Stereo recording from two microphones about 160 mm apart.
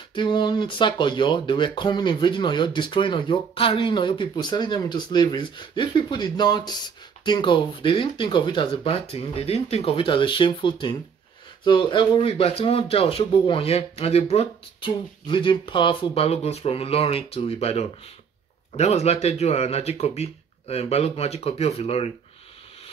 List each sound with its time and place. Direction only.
0.1 s speech: 30° left (ahead or behind)